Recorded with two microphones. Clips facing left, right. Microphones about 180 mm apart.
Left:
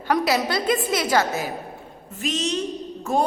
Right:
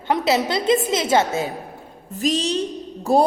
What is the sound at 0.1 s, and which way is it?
A woman's voice, 25° right (ahead or behind).